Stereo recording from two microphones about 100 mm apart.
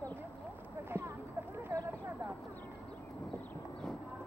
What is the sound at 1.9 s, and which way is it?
Speech, 25° right (ahead or behind).